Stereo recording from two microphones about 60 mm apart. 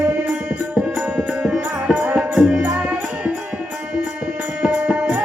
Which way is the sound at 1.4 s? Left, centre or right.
Centre.